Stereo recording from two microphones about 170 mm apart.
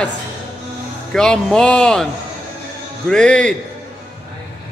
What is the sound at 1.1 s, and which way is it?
Speech, 5° left (ahead or behind).